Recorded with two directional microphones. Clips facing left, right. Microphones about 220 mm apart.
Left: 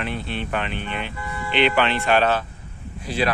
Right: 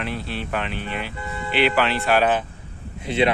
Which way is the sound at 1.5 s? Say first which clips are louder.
Even; 5° right (ahead or behind).